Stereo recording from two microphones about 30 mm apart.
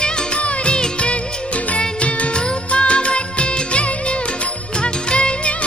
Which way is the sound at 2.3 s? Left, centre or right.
Left.